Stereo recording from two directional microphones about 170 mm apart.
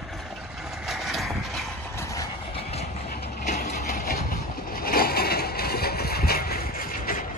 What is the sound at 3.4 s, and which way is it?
Vehicle, 50° left (ahead or behind).